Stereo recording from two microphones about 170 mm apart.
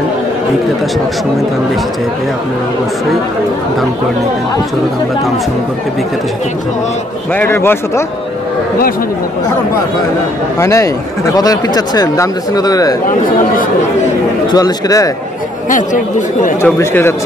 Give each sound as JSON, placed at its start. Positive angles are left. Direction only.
{"t": 7.3, "sound": "a man's voice", "side_deg": 15}
{"t": 10.6, "sound": "speech", "side_deg": 20}
{"t": 14.5, "sound": "speech", "side_deg": 20}
{"t": 15.7, "sound": "speech", "side_deg": 45}
{"t": 16.6, "sound": "a man's voice", "side_deg": 15}